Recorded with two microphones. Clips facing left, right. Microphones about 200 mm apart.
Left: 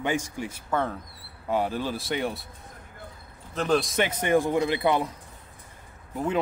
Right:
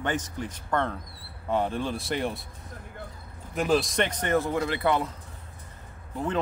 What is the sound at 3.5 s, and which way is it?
A man's voice, 5° right (ahead or behind).